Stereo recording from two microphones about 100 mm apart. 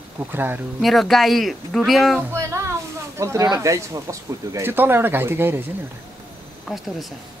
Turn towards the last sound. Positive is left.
turn(degrees=0)  # may be behind; listen again after turning